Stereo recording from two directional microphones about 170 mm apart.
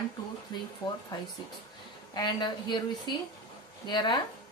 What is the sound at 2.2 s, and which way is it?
Speech, 25° left (ahead or behind).